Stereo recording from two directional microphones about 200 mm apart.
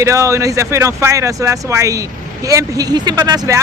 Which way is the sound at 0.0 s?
15° right (ahead or behind).